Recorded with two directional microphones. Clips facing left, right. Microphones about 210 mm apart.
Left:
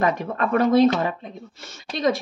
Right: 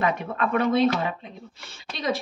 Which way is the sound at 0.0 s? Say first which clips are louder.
Left 3 dB; 40° left (ahead or behind).